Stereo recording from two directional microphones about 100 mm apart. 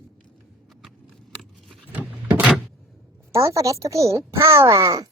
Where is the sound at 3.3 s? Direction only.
30° right (ahead or behind).